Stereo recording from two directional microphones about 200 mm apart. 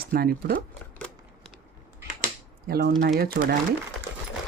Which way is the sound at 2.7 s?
50° right (ahead or behind).